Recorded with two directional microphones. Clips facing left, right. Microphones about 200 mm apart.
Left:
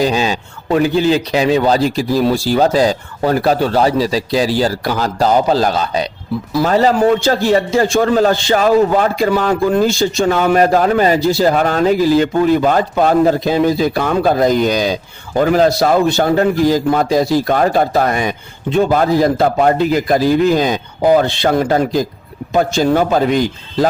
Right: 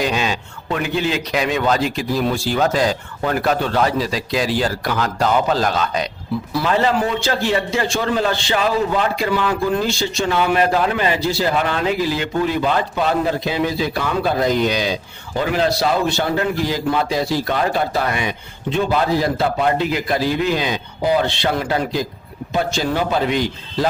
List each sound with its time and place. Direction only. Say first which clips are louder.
0.0 s a man's voice: left 5 dB; 35° left (ahead or behind)